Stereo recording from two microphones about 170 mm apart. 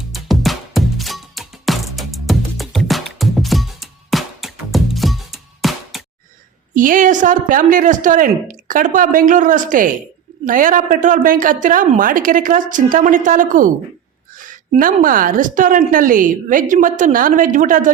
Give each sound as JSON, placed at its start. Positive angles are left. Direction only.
{"t": 0.1, "sound": "music", "side_deg": 0}
{"t": 6.7, "sound": "a woman's voice", "side_deg": -50}